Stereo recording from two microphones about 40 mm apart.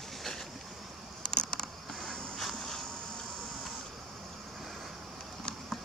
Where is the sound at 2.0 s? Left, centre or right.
Centre.